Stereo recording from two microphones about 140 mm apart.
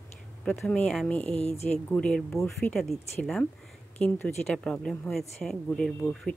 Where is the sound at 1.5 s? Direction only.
50° left (ahead or behind).